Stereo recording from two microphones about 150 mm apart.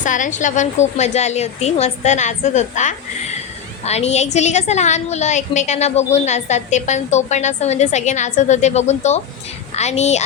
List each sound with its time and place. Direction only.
0.0 s a woman's voice: 60° left (ahead or behind)